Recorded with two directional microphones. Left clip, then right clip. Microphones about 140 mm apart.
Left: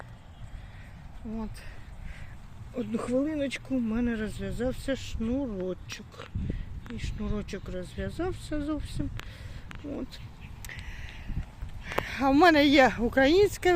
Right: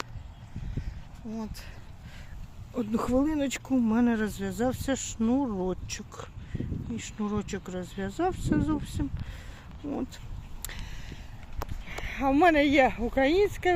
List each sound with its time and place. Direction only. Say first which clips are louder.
1.3 s speech: even; 5° right (ahead or behind)
2.7 s speech: right 2 dB; 35° right (ahead or behind)
10.6 s whispering: even; 30° right (ahead or behind)
11.9 s speech: left 2 dB; 15° left (ahead or behind)